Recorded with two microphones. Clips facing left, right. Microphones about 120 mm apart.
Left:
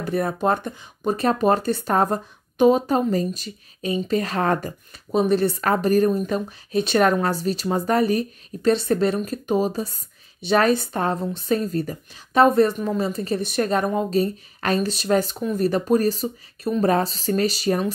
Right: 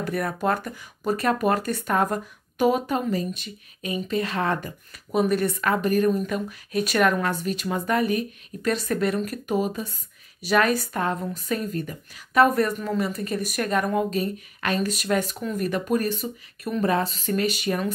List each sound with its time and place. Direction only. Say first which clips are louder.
0.0 s a woman's voice: left 3 dB; 25° left (ahead or behind)
3.1 s a woman's voice: left 4 dB; 40° left (ahead or behind)